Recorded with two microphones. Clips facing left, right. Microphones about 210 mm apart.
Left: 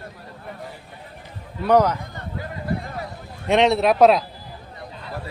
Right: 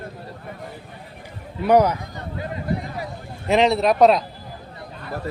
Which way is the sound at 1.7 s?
10° right (ahead or behind).